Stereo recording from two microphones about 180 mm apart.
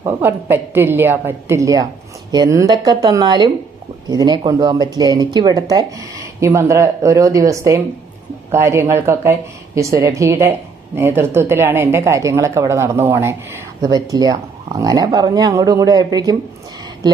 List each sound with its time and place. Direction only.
0.0 s a woman's voice: 10° right (ahead or behind)